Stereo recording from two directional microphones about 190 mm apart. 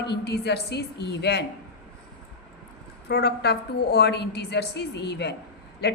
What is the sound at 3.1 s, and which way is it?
A woman's voice, 60° left (ahead or behind).